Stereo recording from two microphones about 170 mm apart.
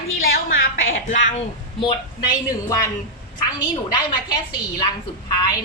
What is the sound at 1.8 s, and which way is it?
Speech, 25° left (ahead or behind).